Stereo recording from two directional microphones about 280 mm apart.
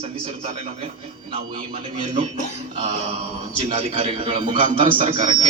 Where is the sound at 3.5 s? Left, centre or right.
Right.